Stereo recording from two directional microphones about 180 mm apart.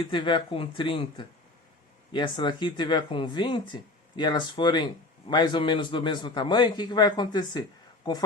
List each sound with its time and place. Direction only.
0.0 s a man's voice: 25° left (ahead or behind)